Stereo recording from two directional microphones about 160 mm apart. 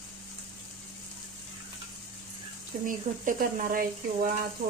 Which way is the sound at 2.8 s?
55° right (ahead or behind).